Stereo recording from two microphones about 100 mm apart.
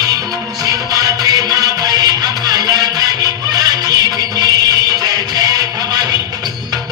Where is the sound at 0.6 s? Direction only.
35° right (ahead or behind).